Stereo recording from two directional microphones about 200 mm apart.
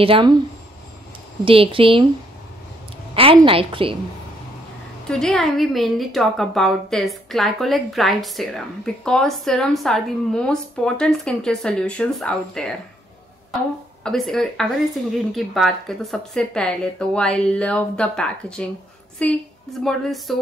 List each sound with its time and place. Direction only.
0.0 s speech: 25° right (ahead or behind)
1.4 s speech: 25° right (ahead or behind)
3.4 s speech: 25° right (ahead or behind)
5.0 s a woman's voice: 5° left (ahead or behind)
14.0 s a woman's voice: centre (ahead or behind)